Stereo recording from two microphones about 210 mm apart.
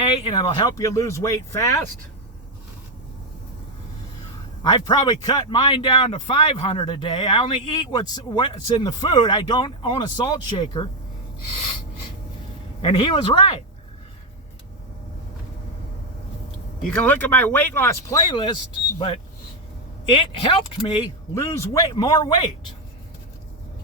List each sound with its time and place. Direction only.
0.2 s speech: 25° left (ahead or behind)
4.6 s a man's voice: 20° left (ahead or behind)
12.8 s a man's voice: 25° left (ahead or behind)
16.9 s a man's voice: 5° left (ahead or behind)